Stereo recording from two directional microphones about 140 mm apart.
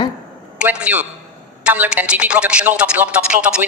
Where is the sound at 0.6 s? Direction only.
10° right (ahead or behind).